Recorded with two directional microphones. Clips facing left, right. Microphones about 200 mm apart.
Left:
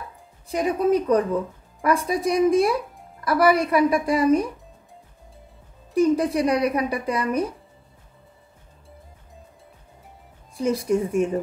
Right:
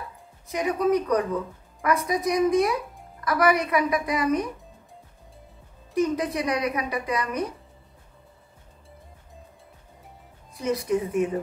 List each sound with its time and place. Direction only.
0.5 s a woman's voice: 30° left (ahead or behind)
5.9 s speech: 30° left (ahead or behind)
10.5 s a woman's voice: 30° left (ahead or behind)